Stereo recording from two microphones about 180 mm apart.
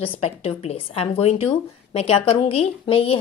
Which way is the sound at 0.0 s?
30° left (ahead or behind).